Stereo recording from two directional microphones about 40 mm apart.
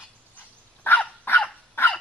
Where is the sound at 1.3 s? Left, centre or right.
Left.